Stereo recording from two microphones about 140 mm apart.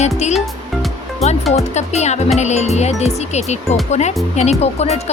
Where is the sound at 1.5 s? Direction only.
50° left (ahead or behind).